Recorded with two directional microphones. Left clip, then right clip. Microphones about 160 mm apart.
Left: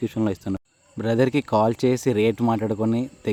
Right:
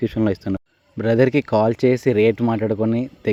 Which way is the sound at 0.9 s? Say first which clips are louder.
Right 5 dB; 10° right (ahead or behind).